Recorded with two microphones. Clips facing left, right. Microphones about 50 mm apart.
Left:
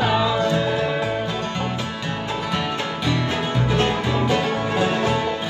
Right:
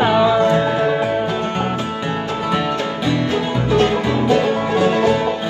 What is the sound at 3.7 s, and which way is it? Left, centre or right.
Music, left.